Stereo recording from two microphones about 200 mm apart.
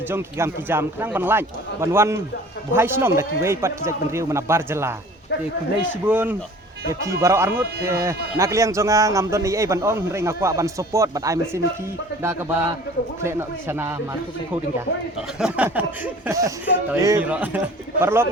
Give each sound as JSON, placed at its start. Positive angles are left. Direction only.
{"t": 0.1, "sound": "a man's voice", "side_deg": -10}
{"t": 6.1, "sound": "a man's voice", "side_deg": -10}
{"t": 15.4, "sound": "a man's voice", "side_deg": -5}